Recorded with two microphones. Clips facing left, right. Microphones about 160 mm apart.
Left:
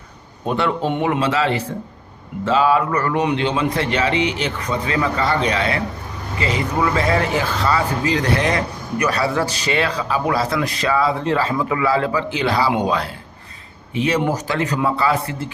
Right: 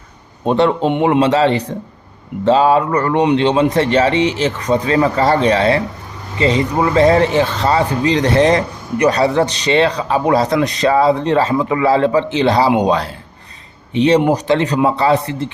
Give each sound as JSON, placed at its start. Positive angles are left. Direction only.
{"t": 0.4, "sound": "speech", "side_deg": -30}
{"t": 14.2, "sound": "a man's voice", "side_deg": -20}